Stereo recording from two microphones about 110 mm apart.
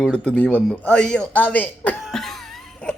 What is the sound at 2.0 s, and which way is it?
Cough, 5° left (ahead or behind).